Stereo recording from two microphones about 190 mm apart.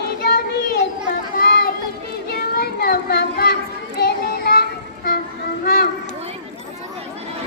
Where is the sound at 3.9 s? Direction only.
55° left (ahead or behind).